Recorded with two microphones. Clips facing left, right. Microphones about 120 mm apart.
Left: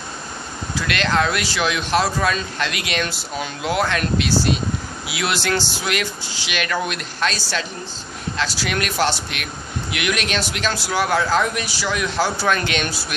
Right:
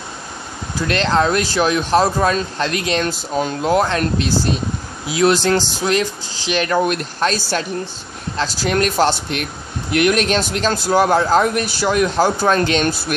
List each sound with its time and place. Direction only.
0.7 s speech: 35° right (ahead or behind)